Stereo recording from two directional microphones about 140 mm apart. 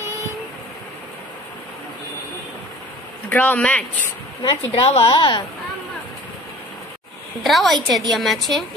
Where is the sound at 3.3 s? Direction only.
10° left (ahead or behind).